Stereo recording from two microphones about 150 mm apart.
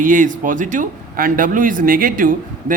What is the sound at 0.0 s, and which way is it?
A man's voice, 60° right (ahead or behind).